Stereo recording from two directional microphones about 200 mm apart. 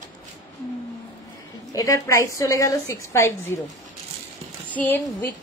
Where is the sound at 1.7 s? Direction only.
15° left (ahead or behind).